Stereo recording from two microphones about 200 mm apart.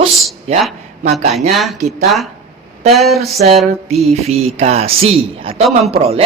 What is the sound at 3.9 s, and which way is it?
A man's voice, 30° right (ahead or behind).